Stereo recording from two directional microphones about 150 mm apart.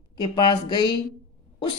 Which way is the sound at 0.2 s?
30° left (ahead or behind).